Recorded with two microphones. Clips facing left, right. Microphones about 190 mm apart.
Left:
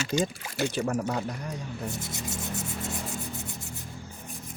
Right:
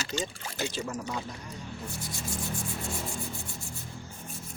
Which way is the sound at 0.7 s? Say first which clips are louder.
Left 6 dB; 60° left (ahead or behind).